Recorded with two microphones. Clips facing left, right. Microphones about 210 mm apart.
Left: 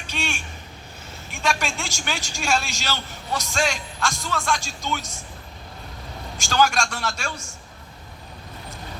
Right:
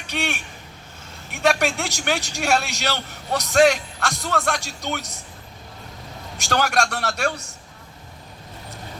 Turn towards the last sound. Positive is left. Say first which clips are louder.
# right 5 dB
turn(degrees=-65)  # may be behind; listen again after turning